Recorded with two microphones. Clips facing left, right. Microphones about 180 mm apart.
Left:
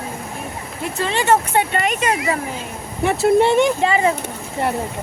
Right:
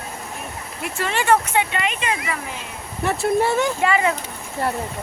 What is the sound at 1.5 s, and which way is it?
Speech, 45° left (ahead or behind).